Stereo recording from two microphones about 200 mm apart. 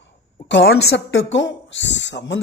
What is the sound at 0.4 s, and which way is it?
A man's voice, 65° left (ahead or behind).